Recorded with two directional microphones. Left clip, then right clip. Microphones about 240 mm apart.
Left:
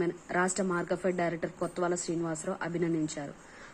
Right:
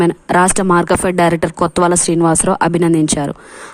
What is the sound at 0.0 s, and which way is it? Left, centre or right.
A woman's voice, right.